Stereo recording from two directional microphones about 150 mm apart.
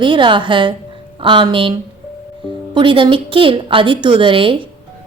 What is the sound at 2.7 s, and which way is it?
A woman's voice, 35° right (ahead or behind).